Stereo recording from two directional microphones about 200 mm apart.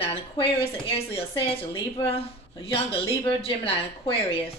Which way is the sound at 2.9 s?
25° left (ahead or behind).